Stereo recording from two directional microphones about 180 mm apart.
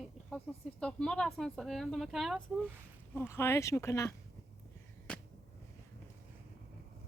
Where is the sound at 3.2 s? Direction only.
15° left (ahead or behind).